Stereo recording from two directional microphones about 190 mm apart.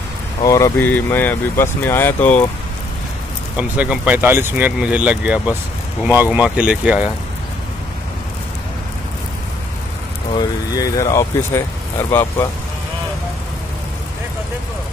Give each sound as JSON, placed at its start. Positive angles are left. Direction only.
{"t": 0.4, "sound": "speech", "side_deg": 20}
{"t": 3.5, "sound": "speech", "side_deg": -5}
{"t": 10.3, "sound": "speech", "side_deg": 20}